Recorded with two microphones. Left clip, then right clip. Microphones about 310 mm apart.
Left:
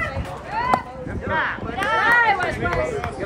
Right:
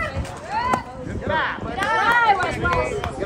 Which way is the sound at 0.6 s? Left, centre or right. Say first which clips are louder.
Even; right.